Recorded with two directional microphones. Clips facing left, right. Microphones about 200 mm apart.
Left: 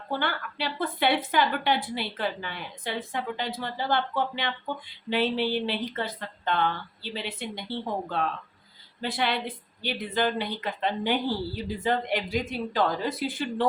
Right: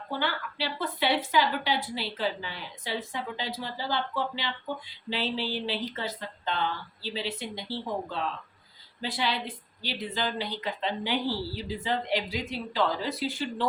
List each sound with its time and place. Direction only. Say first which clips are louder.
0.2 s a woman's voice: left 1 dB; 55° left (ahead or behind)